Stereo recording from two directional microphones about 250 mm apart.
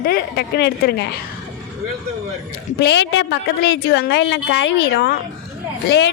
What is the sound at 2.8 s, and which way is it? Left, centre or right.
A woman's voice, left.